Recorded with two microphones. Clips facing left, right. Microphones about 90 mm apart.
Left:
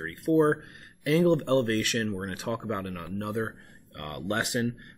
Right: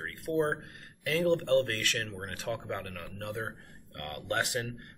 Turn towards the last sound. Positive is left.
turn(degrees=20)  # may be behind; listen again after turning